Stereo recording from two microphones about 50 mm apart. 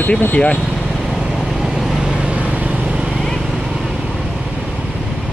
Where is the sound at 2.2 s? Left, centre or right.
Right.